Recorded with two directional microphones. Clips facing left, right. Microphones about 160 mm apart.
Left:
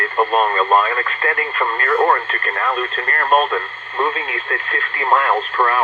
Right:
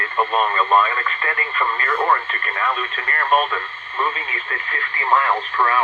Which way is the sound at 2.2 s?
60° left (ahead or behind).